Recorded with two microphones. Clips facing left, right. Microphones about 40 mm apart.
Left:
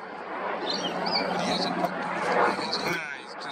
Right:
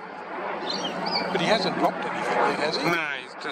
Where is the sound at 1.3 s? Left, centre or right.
Right.